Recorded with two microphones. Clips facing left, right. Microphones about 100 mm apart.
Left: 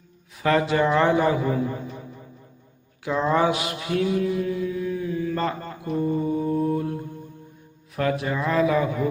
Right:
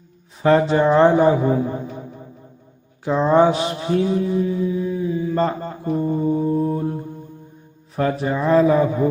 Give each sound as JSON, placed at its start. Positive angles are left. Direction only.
{"t": 0.3, "sound": "a man's voice", "side_deg": -30}
{"t": 3.0, "sound": "mantra", "side_deg": -30}
{"t": 5.4, "sound": "mantra", "side_deg": -30}
{"t": 7.9, "sound": "a man's voice", "side_deg": -30}